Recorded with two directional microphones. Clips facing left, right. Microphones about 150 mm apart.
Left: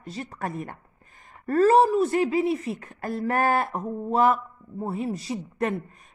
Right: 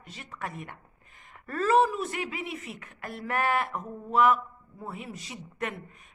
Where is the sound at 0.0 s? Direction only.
35° left (ahead or behind).